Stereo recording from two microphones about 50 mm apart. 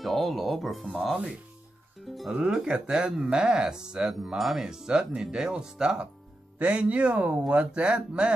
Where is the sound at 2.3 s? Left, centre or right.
Centre.